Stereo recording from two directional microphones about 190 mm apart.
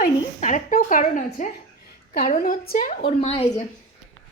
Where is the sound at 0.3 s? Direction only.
40° left (ahead or behind).